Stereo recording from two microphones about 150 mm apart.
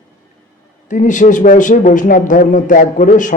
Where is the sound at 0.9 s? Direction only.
60° left (ahead or behind).